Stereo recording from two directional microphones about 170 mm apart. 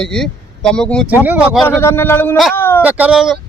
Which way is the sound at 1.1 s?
10° right (ahead or behind).